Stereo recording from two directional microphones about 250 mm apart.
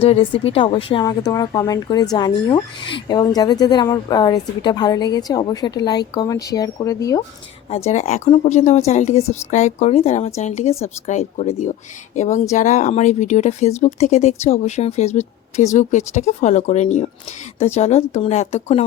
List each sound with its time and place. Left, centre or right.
0.0 s speech: left
7.9 s speech: left